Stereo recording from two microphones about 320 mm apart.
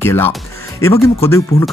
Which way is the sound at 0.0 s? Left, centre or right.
Centre.